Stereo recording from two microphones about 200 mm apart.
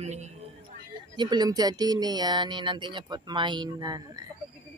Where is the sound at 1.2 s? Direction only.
20° right (ahead or behind).